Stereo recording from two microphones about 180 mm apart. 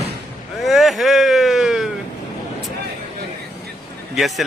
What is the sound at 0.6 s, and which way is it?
Speech, centre (ahead or behind).